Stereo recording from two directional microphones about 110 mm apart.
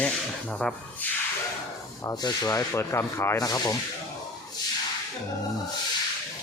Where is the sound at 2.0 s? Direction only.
35° left (ahead or behind).